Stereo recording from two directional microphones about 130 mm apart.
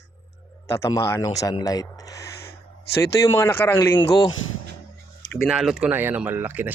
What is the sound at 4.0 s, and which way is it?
Speech, 40° left (ahead or behind).